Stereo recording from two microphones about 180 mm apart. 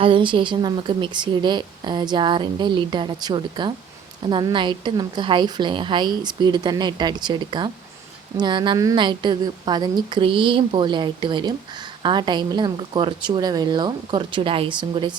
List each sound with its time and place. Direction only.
0.0 s a woman's voice: 30° right (ahead or behind)